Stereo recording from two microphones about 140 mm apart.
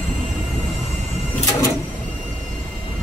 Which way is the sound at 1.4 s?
25° left (ahead or behind).